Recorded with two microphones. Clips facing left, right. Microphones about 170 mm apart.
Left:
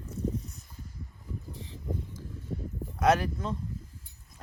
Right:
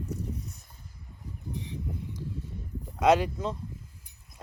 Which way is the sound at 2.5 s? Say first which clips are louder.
Left 7 dB; 65° left (ahead or behind).